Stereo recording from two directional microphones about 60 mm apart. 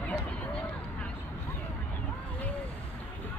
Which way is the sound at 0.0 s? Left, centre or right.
Left.